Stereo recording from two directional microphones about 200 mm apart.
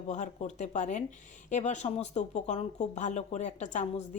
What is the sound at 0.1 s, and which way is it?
Speech, 35° left (ahead or behind).